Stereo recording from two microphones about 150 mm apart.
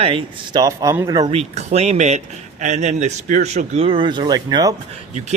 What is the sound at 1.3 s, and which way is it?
Speech, 45° right (ahead or behind).